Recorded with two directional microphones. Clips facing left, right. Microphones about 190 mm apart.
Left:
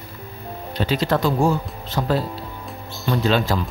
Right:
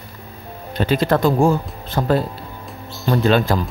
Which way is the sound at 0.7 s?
50° right (ahead or behind).